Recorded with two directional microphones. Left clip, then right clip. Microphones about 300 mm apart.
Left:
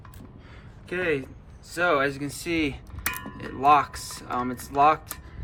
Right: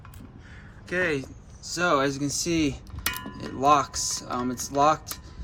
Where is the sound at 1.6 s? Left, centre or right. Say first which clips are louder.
Even; centre.